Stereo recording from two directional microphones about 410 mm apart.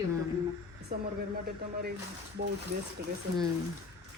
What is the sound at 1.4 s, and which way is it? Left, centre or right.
Speech, right.